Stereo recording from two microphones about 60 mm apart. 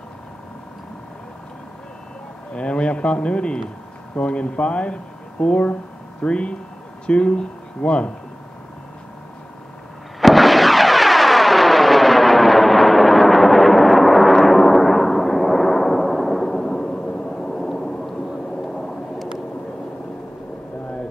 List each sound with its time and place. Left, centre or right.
2.5 s speech: centre
10.2 s music: centre
18.8 s vehicle: centre